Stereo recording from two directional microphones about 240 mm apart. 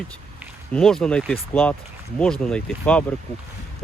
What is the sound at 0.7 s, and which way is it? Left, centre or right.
Speech, centre.